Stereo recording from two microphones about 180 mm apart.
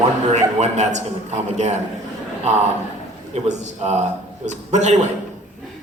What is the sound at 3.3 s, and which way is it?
A man's voice, 35° right (ahead or behind).